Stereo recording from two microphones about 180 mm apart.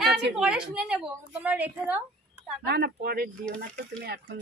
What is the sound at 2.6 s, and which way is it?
Speech, 65° right (ahead or behind).